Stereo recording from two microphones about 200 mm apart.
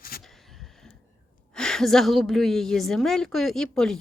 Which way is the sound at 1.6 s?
5° left (ahead or behind).